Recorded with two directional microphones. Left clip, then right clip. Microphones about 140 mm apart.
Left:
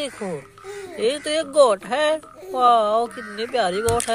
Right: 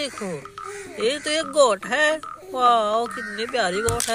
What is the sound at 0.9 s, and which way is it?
Speech, 5° left (ahead or behind).